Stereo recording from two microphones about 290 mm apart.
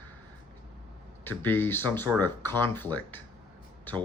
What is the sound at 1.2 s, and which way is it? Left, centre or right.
Speech, centre.